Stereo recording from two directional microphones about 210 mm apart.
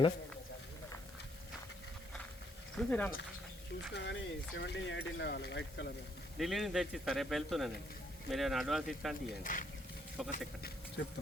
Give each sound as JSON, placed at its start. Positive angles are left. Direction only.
{"t": 2.7, "sound": "speech", "side_deg": 5}
{"t": 3.9, "sound": "speech", "side_deg": 60}
{"t": 6.3, "sound": "speech", "side_deg": 0}
{"t": 9.4, "sound": "speech", "side_deg": 40}
{"t": 10.2, "sound": "speech", "side_deg": 0}